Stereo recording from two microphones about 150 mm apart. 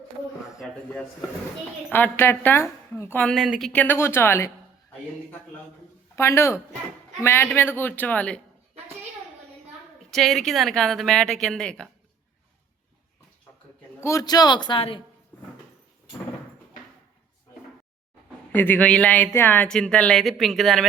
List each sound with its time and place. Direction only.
1.9 s speech: 15° left (ahead or behind)
3.3 s a woman's voice: 5° right (ahead or behind)
3.7 s speech: 10° left (ahead or behind)
6.1 s speech: 20° left (ahead or behind)
10.0 s a woman's voice: centre (ahead or behind)
14.0 s a man's voice: 20° left (ahead or behind)
18.5 s speech: 10° left (ahead or behind)